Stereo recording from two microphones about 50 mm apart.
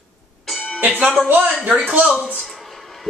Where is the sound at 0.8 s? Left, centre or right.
Right.